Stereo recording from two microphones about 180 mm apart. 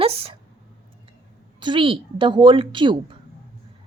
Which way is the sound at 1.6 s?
25° right (ahead or behind).